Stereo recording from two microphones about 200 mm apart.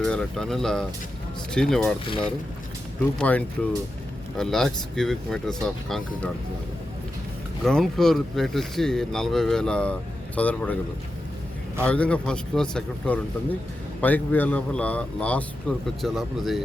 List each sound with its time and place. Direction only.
0.0 s speech: 5° left (ahead or behind)
2.0 s speech: 25° left (ahead or behind)
3.2 s a man's voice: 5° left (ahead or behind)
7.6 s speech: centre (ahead or behind)
11.9 s a man's voice: 5° left (ahead or behind)